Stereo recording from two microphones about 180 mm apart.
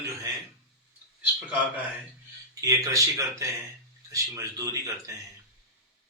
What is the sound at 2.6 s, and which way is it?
Speech, 20° right (ahead or behind).